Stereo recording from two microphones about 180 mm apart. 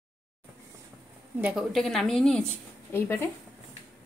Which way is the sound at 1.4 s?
Centre (ahead or behind).